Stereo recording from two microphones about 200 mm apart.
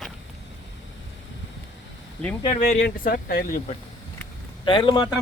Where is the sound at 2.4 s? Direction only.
30° left (ahead or behind).